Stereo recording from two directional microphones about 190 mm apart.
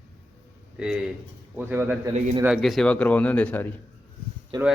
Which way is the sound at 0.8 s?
5° right (ahead or behind).